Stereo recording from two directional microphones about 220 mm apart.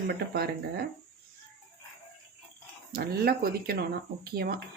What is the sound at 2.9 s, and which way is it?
Speech, 45° right (ahead or behind).